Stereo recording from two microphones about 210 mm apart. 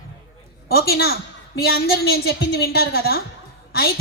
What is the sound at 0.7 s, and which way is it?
A woman's voice, 45° left (ahead or behind).